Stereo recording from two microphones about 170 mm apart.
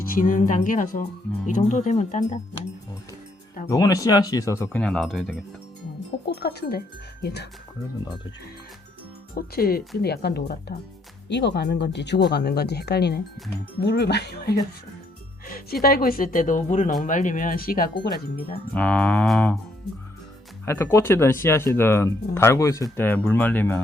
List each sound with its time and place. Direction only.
0.0 s speech: 55° left (ahead or behind)
3.7 s speech: 20° left (ahead or behind)
4.8 s speech: centre (ahead or behind)
6.2 s speech: 70° left (ahead or behind)
9.3 s speech: 60° left (ahead or behind)
11.3 s speech: 90° left
12.3 s speech: 70° left (ahead or behind)
15.4 s speech: 60° left (ahead or behind)
18.7 s speech: 5° left (ahead or behind)
20.7 s speech: 15° left (ahead or behind)